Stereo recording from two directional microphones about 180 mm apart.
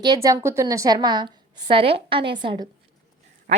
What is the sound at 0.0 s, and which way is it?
A woman's voice, 20° right (ahead or behind).